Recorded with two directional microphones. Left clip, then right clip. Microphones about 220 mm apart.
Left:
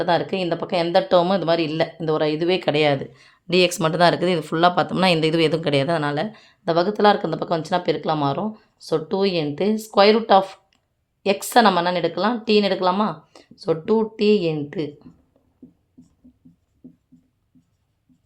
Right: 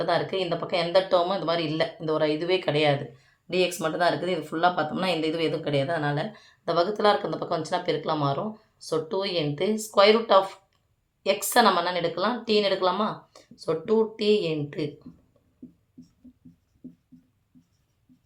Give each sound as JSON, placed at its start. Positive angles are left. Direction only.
{"t": 0.0, "sound": "speech", "side_deg": 50}